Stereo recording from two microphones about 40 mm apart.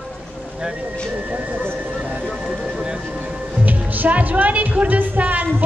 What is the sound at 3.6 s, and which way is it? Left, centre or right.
A woman's voice, right.